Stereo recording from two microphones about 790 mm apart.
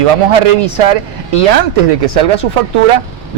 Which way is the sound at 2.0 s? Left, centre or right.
Right.